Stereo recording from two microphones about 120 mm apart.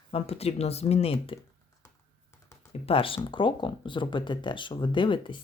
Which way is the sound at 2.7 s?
50° left (ahead or behind).